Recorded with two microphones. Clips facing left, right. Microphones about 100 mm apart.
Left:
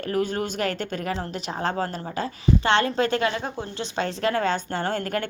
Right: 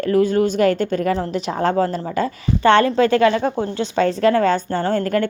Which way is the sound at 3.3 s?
55° right (ahead or behind).